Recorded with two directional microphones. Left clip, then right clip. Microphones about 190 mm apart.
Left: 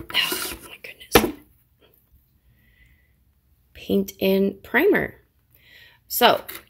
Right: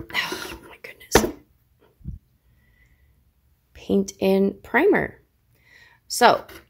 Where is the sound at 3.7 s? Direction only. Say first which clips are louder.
Right 1 dB; 10° right (ahead or behind).